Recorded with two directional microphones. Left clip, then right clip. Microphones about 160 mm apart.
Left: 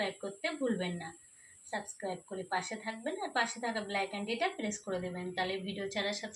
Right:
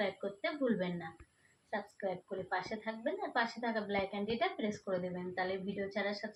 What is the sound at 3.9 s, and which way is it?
A woman's voice, 5° left (ahead or behind).